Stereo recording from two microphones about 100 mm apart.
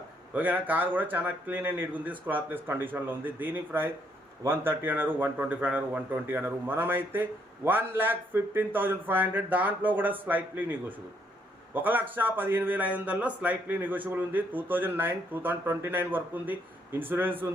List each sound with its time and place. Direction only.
0.3 s speech: 15° right (ahead or behind)